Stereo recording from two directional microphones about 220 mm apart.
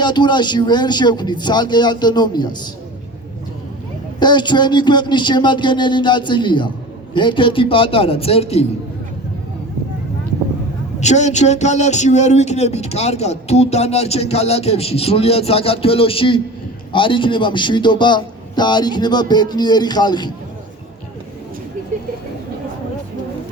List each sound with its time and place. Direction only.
0.0 s speech: 20° left (ahead or behind)
4.2 s speech: 20° left (ahead or behind)
11.0 s speech: 30° left (ahead or behind)